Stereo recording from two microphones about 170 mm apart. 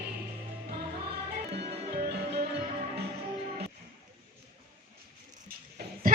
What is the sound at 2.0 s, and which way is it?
Music, 75° right (ahead or behind).